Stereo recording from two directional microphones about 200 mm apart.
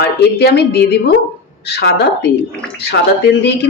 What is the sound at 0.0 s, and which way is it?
A woman's voice, 55° left (ahead or behind).